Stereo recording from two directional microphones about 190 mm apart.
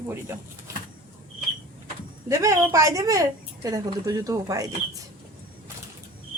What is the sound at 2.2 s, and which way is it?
Speech, 15° right (ahead or behind).